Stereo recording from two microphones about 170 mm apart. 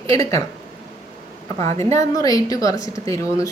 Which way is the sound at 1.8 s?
20° left (ahead or behind).